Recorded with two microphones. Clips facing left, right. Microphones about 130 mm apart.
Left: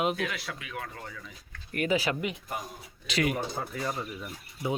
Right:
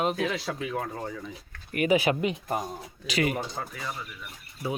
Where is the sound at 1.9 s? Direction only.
20° right (ahead or behind).